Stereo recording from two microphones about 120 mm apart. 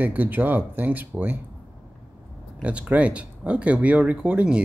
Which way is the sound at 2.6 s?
10° right (ahead or behind).